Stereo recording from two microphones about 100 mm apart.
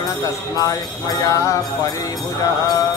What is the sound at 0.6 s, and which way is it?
Jingle bell, 40° left (ahead or behind).